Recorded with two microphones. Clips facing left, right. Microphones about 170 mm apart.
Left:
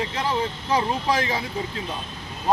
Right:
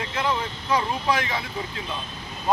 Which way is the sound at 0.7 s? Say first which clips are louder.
Left 1 dB; 40° left (ahead or behind).